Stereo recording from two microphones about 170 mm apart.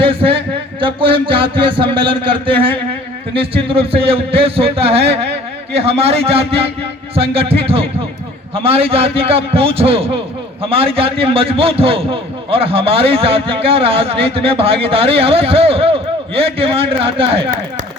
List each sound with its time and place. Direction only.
0.0 s a man's voice: 35° right (ahead or behind)